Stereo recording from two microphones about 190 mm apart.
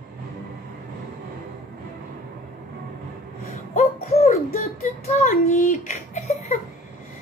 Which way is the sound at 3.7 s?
35° left (ahead or behind).